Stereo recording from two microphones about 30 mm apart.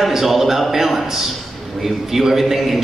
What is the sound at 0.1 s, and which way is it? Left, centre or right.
A man's voice, centre.